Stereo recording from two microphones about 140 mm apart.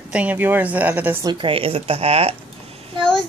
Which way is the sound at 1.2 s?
40° right (ahead or behind).